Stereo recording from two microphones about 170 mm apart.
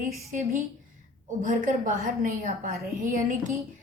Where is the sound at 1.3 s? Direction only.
50° right (ahead or behind).